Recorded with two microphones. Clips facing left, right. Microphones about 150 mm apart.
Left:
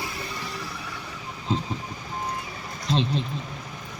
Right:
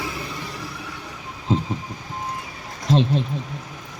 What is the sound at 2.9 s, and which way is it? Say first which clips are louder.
Speech: right 5 dB; 50° right (ahead or behind).